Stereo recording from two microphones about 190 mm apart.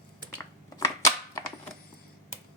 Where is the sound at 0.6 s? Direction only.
15° left (ahead or behind).